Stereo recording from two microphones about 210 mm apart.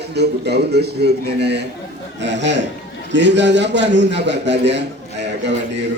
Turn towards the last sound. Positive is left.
turn(degrees=-55)  # may be behind; listen again after turning